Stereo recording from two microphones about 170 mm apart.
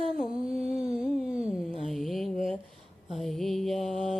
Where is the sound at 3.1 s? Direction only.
Centre (ahead or behind).